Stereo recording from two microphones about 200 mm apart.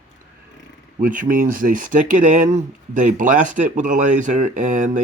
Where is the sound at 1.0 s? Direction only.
40° right (ahead or behind).